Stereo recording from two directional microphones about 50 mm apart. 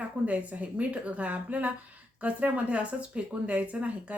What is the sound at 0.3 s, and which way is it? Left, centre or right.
A woman's voice, right.